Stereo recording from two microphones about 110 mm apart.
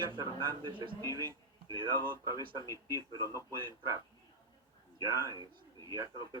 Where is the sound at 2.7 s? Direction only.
30° right (ahead or behind).